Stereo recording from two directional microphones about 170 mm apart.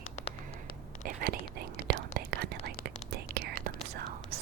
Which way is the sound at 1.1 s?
60° right (ahead or behind).